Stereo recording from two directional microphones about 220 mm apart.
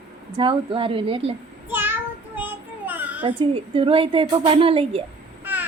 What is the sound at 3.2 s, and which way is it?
A woman's voice, 25° right (ahead or behind).